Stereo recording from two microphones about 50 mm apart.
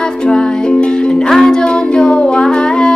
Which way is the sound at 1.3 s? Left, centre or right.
Centre.